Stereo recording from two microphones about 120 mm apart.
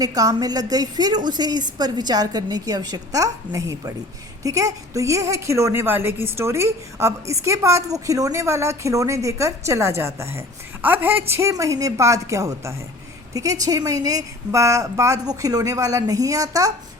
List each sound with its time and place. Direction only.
0.0 s a woman's voice: 30° right (ahead or behind)